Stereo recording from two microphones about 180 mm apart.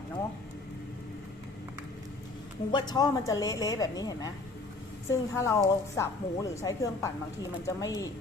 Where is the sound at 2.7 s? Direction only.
20° left (ahead or behind).